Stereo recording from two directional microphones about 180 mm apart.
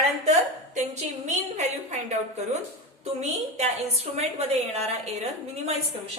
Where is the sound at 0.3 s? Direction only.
40° right (ahead or behind).